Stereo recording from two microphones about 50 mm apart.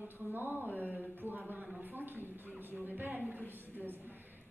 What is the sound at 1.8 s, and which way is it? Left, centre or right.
Speech, right.